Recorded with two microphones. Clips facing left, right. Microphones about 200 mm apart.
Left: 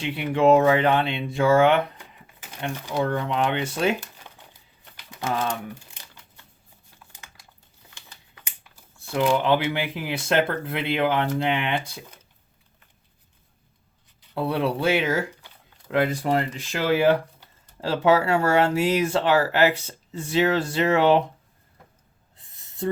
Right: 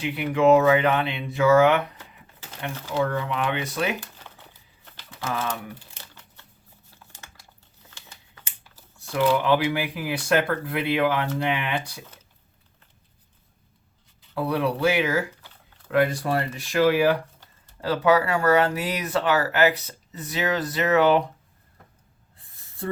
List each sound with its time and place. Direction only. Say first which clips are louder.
0.0 s speech: even; 30° left (ahead or behind)
2.9 s speech: even; 25° left (ahead or behind)
5.2 s speech: left 3 dB; 30° left (ahead or behind)
9.1 s speech: even; 25° left (ahead or behind)
14.3 s speech: even; 25° left (ahead or behind)
22.5 s a sound: left 4 dB; 20° left (ahead or behind)